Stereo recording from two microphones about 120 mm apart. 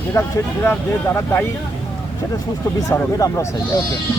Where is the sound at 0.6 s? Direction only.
15° left (ahead or behind).